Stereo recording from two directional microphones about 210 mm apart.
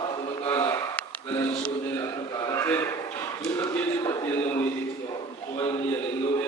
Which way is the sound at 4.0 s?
15° left (ahead or behind).